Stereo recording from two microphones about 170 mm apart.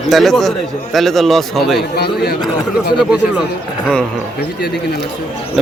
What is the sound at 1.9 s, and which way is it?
Speech, 70° left (ahead or behind).